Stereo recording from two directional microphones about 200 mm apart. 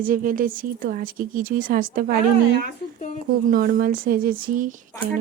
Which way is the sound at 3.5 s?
45° right (ahead or behind).